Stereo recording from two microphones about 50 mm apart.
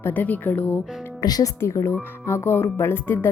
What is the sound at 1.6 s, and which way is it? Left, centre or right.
A woman's voice, left.